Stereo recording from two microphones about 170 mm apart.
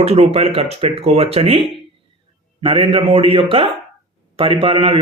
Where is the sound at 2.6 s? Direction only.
30° right (ahead or behind).